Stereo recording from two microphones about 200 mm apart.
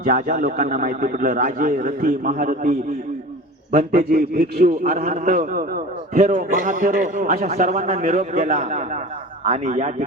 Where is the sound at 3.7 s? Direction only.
45° right (ahead or behind).